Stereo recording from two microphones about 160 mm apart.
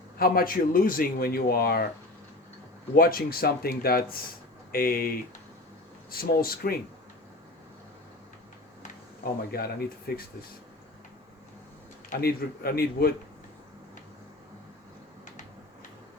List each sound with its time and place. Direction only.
0.2 s speech: 65° left (ahead or behind)
2.9 s speech: 65° left (ahead or behind)
8.8 s a sound: 70° left (ahead or behind)
10.1 s speech: 80° left
12.2 s speech: 70° left (ahead or behind)